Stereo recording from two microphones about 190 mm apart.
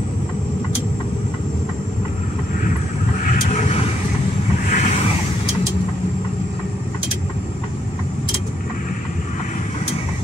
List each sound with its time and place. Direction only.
3.5 s vehicle: 35° left (ahead or behind)